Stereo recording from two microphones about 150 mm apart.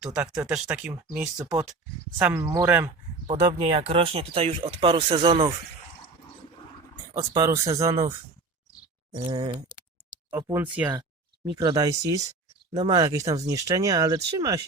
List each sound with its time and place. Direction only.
0.0 s speech: 5° right (ahead or behind)
1.4 s speech: 25° right (ahead or behind)
3.2 s speech: 40° right (ahead or behind)
7.2 s speech: 25° right (ahead or behind)
9.1 s speech: 30° right (ahead or behind)
10.5 s speech: 10° right (ahead or behind)
11.5 s speech: 25° right (ahead or behind)